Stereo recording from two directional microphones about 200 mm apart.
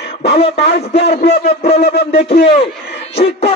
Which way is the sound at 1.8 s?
50° left (ahead or behind).